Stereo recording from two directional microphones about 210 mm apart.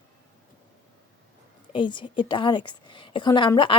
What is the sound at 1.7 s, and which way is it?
A woman's voice, 20° left (ahead or behind).